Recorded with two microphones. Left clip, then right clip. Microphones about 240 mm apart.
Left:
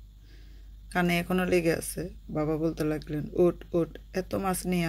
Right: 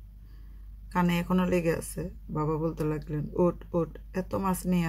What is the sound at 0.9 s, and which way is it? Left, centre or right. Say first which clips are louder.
Speech: left 1 dB; centre.